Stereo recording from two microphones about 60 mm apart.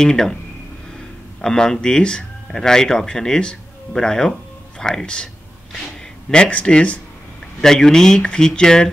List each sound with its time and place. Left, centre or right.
0.0 s speech: centre
1.4 s speech: centre